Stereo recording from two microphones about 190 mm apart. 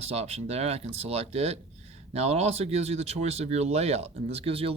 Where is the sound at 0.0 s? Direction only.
35° right (ahead or behind).